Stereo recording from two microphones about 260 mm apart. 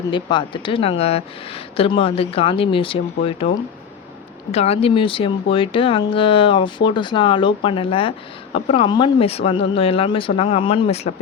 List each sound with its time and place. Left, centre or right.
0.1 s speech: centre
4.5 s speech: left